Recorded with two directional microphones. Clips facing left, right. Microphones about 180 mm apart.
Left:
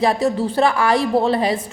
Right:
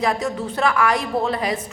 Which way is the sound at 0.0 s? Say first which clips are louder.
Left 5 dB; 30° left (ahead or behind).